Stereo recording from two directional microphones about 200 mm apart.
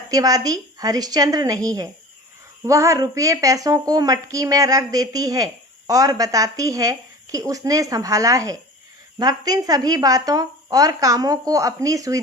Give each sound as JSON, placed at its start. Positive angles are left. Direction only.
{"t": 0.1, "sound": "speech", "side_deg": -15}